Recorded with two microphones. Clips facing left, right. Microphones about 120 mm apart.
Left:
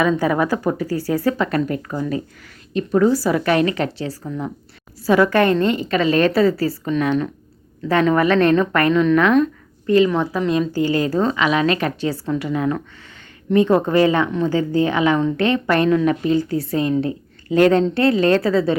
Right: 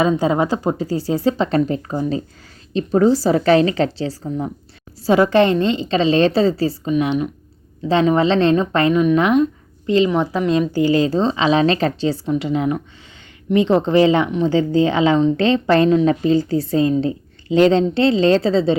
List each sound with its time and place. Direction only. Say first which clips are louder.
0.0 s a woman's voice: right 1 dB; 25° right (ahead or behind)